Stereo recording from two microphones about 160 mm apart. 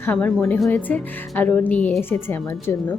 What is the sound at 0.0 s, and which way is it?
Speech, 10° left (ahead or behind).